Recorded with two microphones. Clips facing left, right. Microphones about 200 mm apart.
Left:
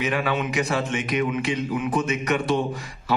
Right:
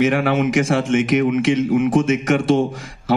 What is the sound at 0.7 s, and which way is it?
A man's voice, 80° right.